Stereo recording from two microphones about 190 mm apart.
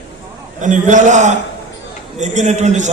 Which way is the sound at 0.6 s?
40° right (ahead or behind).